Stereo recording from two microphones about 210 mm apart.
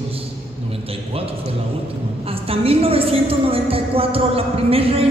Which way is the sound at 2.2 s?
25° right (ahead or behind).